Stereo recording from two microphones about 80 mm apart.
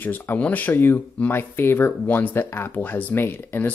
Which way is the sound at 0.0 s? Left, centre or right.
Left.